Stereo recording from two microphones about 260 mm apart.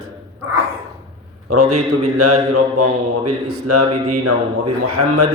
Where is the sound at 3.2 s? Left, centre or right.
Right.